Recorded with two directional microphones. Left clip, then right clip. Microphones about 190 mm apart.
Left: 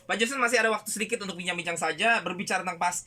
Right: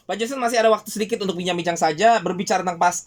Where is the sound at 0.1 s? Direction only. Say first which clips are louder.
Right 3 dB; 25° right (ahead or behind).